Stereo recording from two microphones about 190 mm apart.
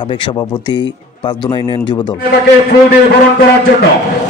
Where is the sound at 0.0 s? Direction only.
25° left (ahead or behind).